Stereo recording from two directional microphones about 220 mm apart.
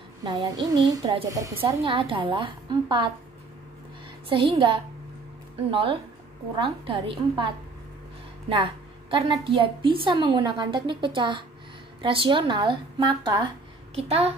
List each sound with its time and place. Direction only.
0.2 s a woman's voice: 15° right (ahead or behind)
4.3 s a woman's voice: 25° right (ahead or behind)
9.1 s a woman's voice: 25° right (ahead or behind)